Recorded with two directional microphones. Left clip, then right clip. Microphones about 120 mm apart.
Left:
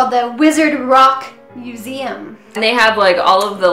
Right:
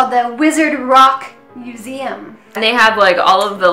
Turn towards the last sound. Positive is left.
turn(degrees=-15)  # may be behind; listen again after turning